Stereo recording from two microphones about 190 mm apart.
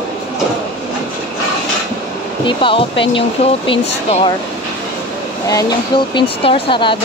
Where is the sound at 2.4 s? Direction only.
25° left (ahead or behind).